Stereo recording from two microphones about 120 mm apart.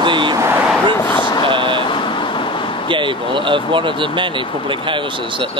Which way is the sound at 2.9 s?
45° right (ahead or behind).